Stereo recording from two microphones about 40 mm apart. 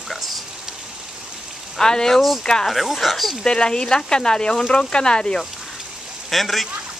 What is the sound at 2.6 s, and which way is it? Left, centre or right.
Speech, centre.